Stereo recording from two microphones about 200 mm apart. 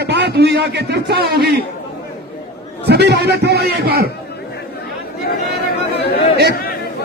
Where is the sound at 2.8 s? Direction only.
55° right (ahead or behind).